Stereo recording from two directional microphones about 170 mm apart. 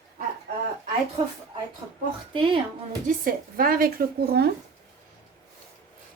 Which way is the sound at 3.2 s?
60° right (ahead or behind).